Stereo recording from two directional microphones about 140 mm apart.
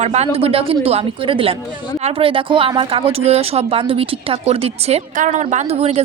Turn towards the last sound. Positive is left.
turn(degrees=-45)  # may be behind; listen again after turning